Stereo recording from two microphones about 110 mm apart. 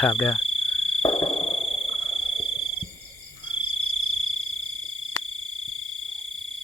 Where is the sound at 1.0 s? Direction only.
60° left (ahead or behind).